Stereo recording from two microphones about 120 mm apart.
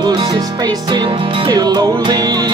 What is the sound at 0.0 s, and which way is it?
Music, 40° right (ahead or behind).